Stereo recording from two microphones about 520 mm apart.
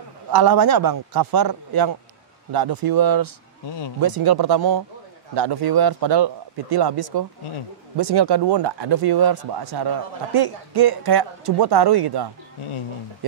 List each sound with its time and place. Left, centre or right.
0.3 s a man's voice: right